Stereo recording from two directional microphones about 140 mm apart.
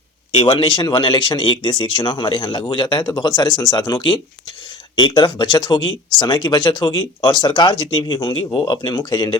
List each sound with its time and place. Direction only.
0.3 s speech: 40° left (ahead or behind)